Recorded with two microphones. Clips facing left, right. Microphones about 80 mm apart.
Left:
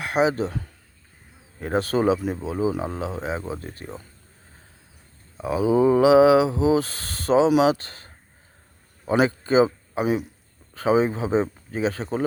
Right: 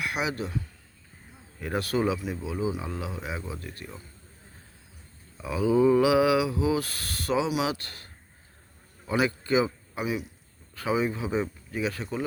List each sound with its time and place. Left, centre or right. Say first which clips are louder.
0.0 s speech: left 9 dB; left
1.5 s speech: left 5 dB; left
5.4 s speech: left 3 dB; left